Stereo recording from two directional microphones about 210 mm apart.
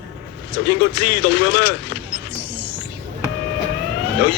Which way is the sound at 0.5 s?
55° left (ahead or behind).